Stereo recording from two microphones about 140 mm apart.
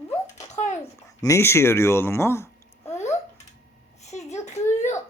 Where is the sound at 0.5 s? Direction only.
55° left (ahead or behind).